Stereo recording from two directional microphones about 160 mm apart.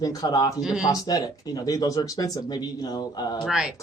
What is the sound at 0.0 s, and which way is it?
Speech, 20° left (ahead or behind).